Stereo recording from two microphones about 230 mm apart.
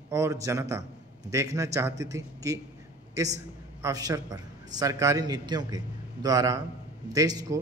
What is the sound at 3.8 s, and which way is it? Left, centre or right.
A man's voice, centre.